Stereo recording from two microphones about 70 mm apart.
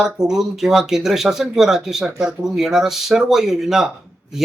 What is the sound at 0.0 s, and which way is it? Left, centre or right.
A man's voice, centre.